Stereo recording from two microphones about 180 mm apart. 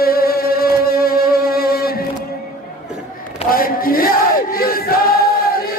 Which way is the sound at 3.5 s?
50° left (ahead or behind).